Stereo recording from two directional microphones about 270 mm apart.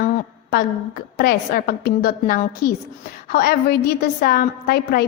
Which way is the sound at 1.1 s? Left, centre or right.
Left.